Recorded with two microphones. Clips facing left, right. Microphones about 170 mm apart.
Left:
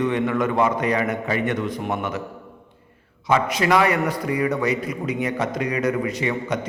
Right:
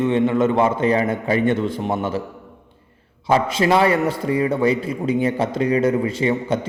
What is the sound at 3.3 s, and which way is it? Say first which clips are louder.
A man's voice: right 2 dB; 30° right (ahead or behind).